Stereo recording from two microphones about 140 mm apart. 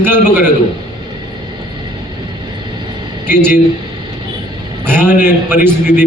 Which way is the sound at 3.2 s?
15° right (ahead or behind).